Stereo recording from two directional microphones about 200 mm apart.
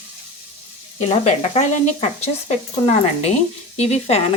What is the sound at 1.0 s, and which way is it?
Speech, 30° left (ahead or behind).